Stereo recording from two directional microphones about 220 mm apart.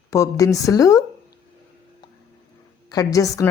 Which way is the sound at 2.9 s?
15° left (ahead or behind).